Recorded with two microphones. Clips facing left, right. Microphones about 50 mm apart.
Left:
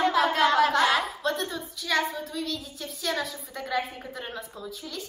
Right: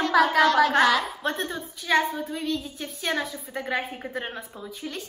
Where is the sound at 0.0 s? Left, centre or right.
Left.